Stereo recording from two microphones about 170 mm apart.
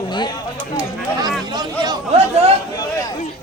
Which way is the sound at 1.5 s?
25° right (ahead or behind).